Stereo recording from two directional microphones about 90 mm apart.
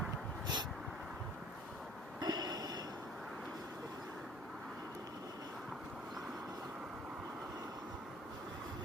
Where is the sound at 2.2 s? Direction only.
50° right (ahead or behind).